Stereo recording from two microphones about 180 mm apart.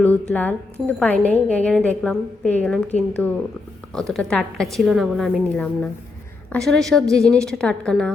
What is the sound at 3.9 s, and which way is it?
A woman's voice, centre (ahead or behind).